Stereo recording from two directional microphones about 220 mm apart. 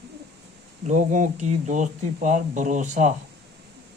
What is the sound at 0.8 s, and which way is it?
Speech, 35° right (ahead or behind).